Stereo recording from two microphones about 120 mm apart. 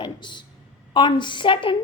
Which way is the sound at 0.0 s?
40° left (ahead or behind).